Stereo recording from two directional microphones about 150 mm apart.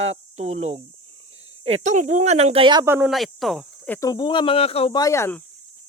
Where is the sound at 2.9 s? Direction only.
15° right (ahead or behind).